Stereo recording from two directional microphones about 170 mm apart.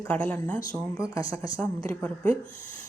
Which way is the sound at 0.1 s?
10° left (ahead or behind).